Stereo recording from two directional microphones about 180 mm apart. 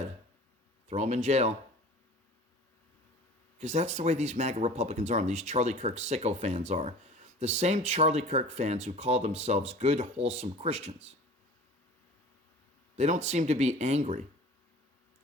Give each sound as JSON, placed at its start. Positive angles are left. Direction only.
{"t": 0.9, "sound": "speech", "side_deg": -40}
{"t": 3.6, "sound": "speech", "side_deg": -40}
{"t": 13.0, "sound": "speech", "side_deg": -40}